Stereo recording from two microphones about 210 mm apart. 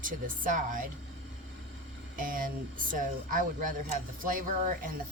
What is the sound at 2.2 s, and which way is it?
Speech, 40° right (ahead or behind).